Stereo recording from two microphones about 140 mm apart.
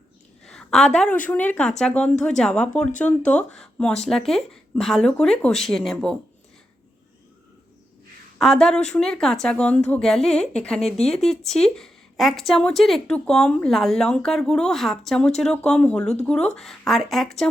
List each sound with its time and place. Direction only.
0.4 s a sound: 5° left (ahead or behind)
1.3 s speech: 10° left (ahead or behind)
8.4 s speech: 5° left (ahead or behind)